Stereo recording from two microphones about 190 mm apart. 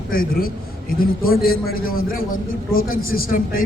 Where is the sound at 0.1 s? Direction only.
50° left (ahead or behind).